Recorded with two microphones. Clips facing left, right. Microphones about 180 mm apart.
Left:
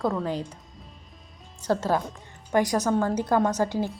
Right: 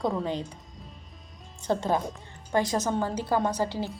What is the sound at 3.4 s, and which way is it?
Speech, 10° right (ahead or behind).